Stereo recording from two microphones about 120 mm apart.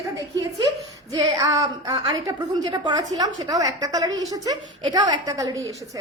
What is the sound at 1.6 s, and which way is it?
A woman's voice, 30° right (ahead or behind).